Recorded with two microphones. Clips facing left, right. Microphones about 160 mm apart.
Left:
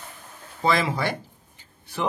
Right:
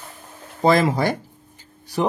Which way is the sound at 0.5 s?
40° right (ahead or behind).